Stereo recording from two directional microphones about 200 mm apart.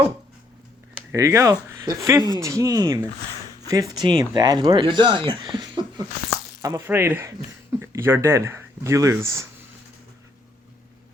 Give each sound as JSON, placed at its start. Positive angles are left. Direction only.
{"t": 1.1, "sound": "speech", "side_deg": -15}